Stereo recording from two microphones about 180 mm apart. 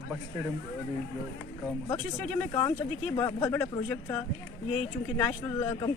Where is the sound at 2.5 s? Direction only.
20° left (ahead or behind).